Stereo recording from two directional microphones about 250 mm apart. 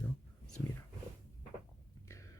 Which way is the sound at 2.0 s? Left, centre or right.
Centre.